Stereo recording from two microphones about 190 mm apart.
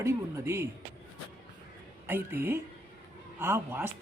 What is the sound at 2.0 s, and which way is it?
A woman's voice, 10° right (ahead or behind).